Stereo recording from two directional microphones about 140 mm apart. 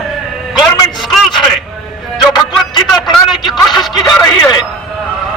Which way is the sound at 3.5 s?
30° left (ahead or behind).